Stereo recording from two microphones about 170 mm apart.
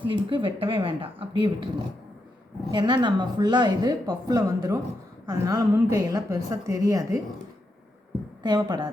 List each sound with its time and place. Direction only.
0.0 s a woman's voice: 30° right (ahead or behind)
8.4 s a woman's voice: 25° right (ahead or behind)